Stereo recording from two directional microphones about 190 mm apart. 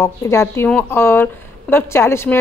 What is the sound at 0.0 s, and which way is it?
A woman's voice, 15° left (ahead or behind).